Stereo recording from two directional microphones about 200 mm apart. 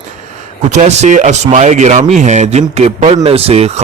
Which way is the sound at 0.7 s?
35° right (ahead or behind).